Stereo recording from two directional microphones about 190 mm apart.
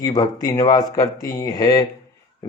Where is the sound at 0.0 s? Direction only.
20° left (ahead or behind).